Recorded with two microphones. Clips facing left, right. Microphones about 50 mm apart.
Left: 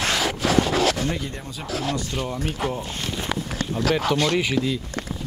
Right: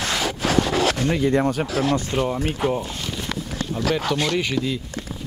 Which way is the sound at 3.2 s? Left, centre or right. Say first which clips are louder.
Left 2 dB; centre.